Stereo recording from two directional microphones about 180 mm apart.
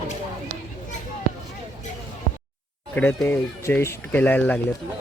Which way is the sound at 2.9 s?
10° left (ahead or behind).